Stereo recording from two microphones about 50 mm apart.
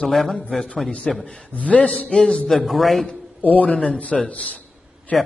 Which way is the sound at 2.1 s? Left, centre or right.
Centre.